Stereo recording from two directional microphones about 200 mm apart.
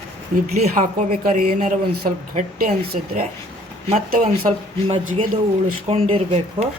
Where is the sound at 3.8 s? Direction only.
35° right (ahead or behind).